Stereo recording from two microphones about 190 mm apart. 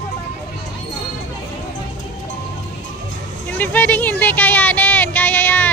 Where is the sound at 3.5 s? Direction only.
10° left (ahead or behind).